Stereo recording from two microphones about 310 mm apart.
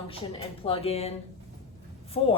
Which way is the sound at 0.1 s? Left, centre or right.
Centre.